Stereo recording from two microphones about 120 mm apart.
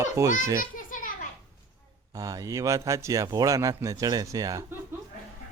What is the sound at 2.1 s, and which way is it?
Speech, 30° right (ahead or behind).